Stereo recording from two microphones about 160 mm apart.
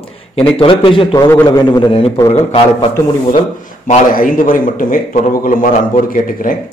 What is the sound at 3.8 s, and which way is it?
A man's voice, 55° left (ahead or behind).